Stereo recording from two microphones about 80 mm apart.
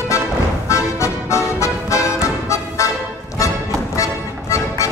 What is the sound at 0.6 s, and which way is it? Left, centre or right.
Music, left.